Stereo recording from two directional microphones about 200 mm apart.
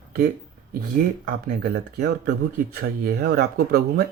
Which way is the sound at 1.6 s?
50° right (ahead or behind).